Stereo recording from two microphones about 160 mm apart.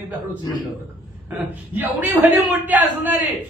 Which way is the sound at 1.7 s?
10° right (ahead or behind).